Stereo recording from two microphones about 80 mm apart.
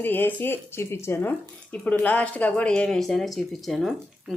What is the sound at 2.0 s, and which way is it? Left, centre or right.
Speech, centre.